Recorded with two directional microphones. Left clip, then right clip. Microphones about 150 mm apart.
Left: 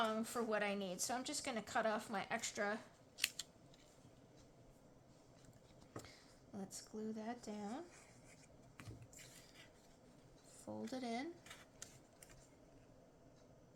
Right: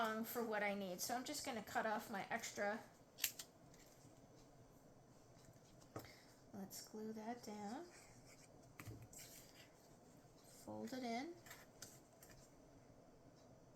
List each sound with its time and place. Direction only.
0.0 s a woman's voice: 45° left (ahead or behind)
3.2 s scissors: 25° left (ahead or behind)
6.0 s speech: 45° left (ahead or behind)
10.7 s speech: 40° left (ahead or behind)